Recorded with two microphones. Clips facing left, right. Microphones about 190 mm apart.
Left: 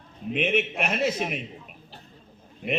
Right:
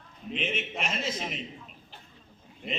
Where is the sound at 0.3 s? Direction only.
60° left (ahead or behind).